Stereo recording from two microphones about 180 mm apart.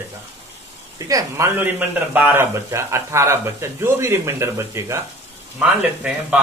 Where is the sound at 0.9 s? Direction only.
20° right (ahead or behind).